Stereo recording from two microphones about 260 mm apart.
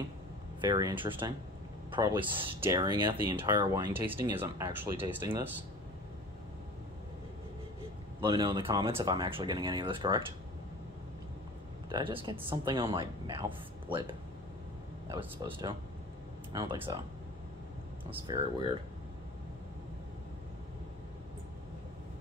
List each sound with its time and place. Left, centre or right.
0.7 s speech: centre
8.2 s speech: centre
11.9 s speech: centre
16.9 s speech: centre
18.3 s speech: centre